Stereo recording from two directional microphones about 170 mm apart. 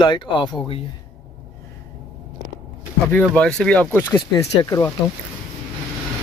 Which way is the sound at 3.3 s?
5° left (ahead or behind).